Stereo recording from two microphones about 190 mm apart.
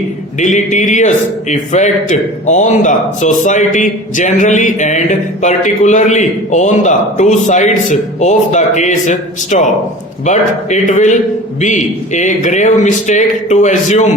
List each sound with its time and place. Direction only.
0.3 s speech: 40° left (ahead or behind)